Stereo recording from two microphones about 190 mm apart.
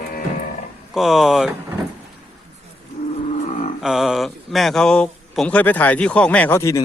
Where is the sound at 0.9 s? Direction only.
Centre (ahead or behind).